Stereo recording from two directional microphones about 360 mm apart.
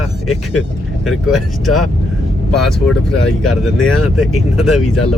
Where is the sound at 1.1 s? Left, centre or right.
Centre.